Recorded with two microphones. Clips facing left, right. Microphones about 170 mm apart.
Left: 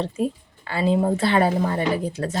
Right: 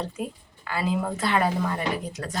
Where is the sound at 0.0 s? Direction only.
30° left (ahead or behind).